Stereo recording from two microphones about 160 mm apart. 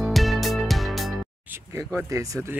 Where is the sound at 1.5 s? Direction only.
15° right (ahead or behind).